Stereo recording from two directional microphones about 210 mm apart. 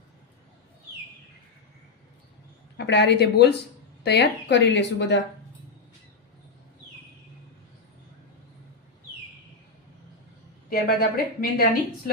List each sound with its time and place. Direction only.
2.7 s speech: 55° left (ahead or behind)
10.7 s a woman's voice: 45° left (ahead or behind)